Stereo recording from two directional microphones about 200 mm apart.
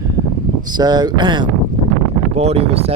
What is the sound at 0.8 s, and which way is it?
Speech, 20° right (ahead or behind).